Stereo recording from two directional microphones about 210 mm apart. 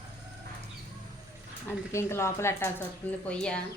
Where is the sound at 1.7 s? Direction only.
10° left (ahead or behind).